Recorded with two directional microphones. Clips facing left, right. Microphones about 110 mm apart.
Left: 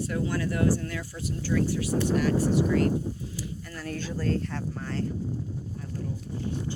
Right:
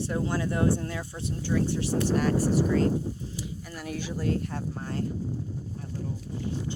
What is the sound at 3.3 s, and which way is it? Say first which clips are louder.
Speech: even; 20° right (ahead or behind).